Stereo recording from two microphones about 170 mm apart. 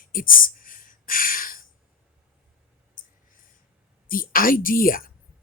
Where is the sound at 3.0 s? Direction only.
50° left (ahead or behind).